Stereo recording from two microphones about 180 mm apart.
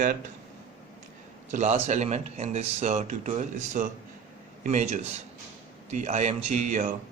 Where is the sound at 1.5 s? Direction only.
40° right (ahead or behind).